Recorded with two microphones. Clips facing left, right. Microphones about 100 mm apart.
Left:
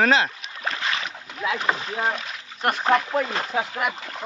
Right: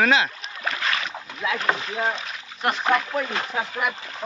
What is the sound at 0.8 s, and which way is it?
Boat, 25° left (ahead or behind).